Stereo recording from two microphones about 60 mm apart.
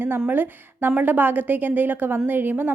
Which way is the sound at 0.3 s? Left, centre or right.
Right.